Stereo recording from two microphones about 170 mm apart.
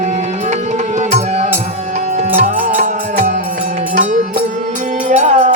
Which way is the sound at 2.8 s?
45° right (ahead or behind).